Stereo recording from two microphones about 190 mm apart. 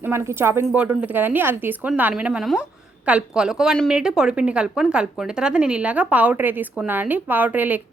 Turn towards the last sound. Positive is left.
turn(degrees=-10)  # may be behind; listen again after turning